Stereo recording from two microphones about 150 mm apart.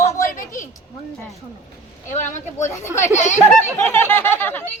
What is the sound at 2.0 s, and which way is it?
Speech, 55° left (ahead or behind).